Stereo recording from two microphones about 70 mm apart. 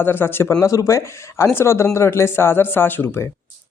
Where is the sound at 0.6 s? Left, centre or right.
Left.